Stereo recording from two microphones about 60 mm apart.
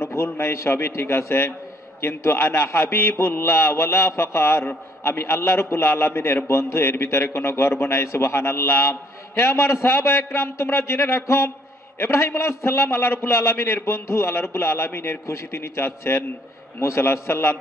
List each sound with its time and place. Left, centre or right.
0.1 s a man's voice: left